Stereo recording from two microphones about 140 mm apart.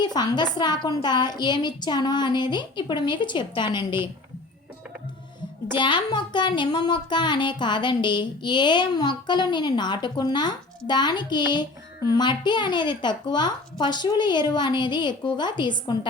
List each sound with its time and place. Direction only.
0.0 s a child's voice: 30° left (ahead or behind)
5.7 s a child's voice: 35° left (ahead or behind)